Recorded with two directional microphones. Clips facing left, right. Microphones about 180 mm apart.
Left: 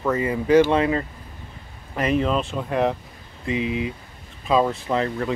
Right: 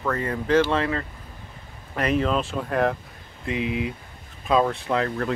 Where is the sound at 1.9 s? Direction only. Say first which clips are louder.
Left 1 dB; centre (ahead or behind).